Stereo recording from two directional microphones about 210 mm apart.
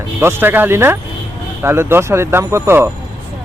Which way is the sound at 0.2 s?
10° right (ahead or behind).